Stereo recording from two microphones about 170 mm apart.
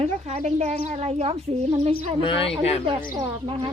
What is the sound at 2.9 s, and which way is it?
Speech, 30° right (ahead or behind).